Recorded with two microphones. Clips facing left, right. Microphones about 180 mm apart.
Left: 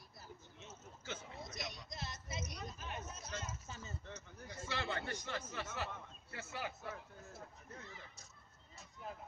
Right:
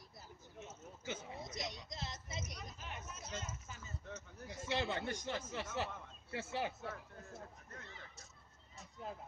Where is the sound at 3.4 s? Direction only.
30° left (ahead or behind).